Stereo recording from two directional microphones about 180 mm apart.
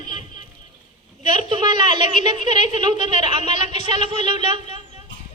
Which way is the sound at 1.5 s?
25° right (ahead or behind).